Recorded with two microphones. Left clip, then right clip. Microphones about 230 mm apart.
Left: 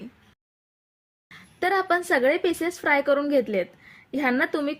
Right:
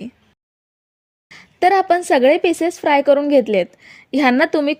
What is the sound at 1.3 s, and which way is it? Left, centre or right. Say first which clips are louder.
A woman's voice: right 10 dB; right.